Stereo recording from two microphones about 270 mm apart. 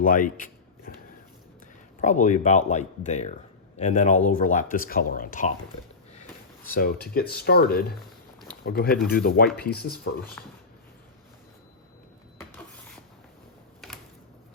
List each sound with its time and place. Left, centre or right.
0.0 s a sound: left
2.0 s speech: left
6.7 s speech: left
10.4 s speech: centre